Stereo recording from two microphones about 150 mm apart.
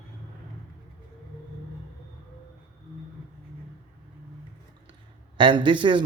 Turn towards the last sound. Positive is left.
turn(degrees=-30)  # may be behind; listen again after turning